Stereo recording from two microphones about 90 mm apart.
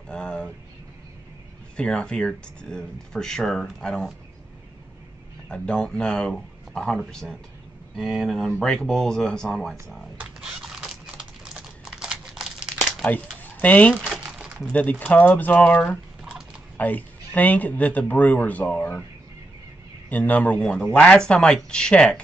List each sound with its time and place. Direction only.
0.1 s a sound: 10° left (ahead or behind)
1.8 s speech: 10° left (ahead or behind)
5.5 s speech: 10° left (ahead or behind)
10.4 s a sound: 5° right (ahead or behind)
11.4 s crumpling: 5° right (ahead or behind)
13.0 s speech: 20° left (ahead or behind)
20.1 s speech: 20° left (ahead or behind)